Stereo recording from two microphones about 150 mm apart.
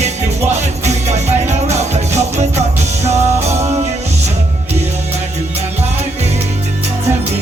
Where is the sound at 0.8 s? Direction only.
50° right (ahead or behind).